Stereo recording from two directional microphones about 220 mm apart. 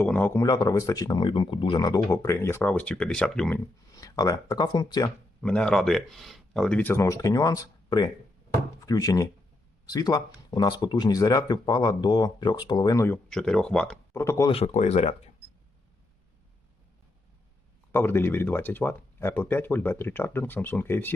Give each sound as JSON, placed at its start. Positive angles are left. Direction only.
{"t": 0.0, "sound": "speech", "side_deg": 5}
{"t": 3.9, "sound": "speech", "side_deg": 15}
{"t": 5.4, "sound": "speech", "side_deg": 5}
{"t": 14.5, "sound": "speech", "side_deg": 30}
{"t": 17.9, "sound": "speech", "side_deg": 10}